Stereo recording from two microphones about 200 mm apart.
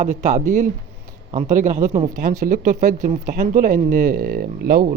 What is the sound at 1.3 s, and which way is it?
Speech, 40° right (ahead or behind).